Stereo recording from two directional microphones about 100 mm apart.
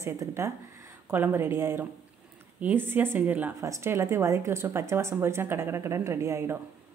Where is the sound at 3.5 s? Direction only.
30° right (ahead or behind).